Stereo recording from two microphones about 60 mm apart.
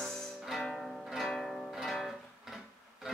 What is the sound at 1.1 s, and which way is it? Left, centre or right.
Zither, centre.